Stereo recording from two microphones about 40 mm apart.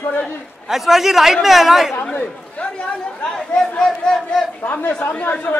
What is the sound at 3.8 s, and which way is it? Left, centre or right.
Speech, centre.